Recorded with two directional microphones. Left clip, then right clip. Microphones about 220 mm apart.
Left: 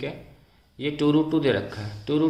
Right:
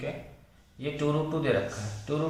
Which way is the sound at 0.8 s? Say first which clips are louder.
Left 7 dB; 45° left (ahead or behind).